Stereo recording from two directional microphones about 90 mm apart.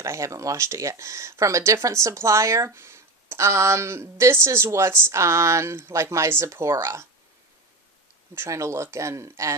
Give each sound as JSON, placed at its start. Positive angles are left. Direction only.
{"t": 0.0, "sound": "speech", "side_deg": -35}
{"t": 8.4, "sound": "speech", "side_deg": -35}